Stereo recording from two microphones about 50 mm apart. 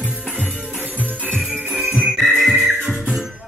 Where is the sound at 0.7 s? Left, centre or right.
Left.